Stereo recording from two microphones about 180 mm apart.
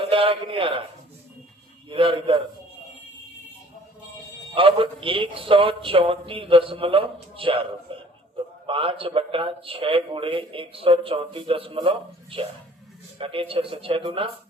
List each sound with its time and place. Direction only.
0.1 s a man's voice: 30° right (ahead or behind)
1.9 s a man's voice: 30° right (ahead or behind)
4.5 s a man's voice: 30° right (ahead or behind)